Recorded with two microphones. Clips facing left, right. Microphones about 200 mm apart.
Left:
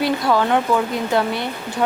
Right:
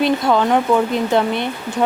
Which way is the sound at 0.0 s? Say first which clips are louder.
Right 2 dB; 20° right (ahead or behind).